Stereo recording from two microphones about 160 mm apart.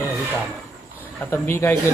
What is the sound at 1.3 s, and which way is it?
Speech, 15° left (ahead or behind).